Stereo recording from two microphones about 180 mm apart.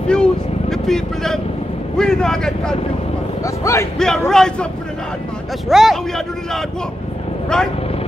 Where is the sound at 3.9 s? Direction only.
5° left (ahead or behind).